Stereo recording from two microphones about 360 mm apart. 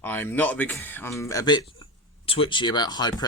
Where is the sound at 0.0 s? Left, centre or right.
Centre.